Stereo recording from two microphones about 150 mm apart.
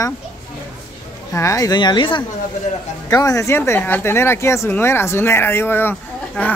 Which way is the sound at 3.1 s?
20° left (ahead or behind).